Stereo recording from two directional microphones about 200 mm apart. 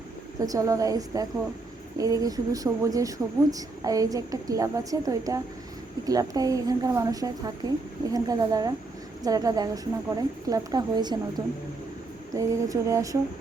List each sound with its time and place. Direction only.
0.4 s a woman's voice: 15° right (ahead or behind)
12.3 s speech: 15° right (ahead or behind)